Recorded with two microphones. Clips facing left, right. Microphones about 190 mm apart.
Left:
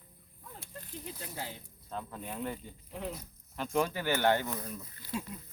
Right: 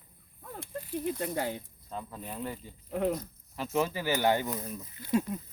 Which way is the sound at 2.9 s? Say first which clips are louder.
Right 10 dB; 55° right (ahead or behind).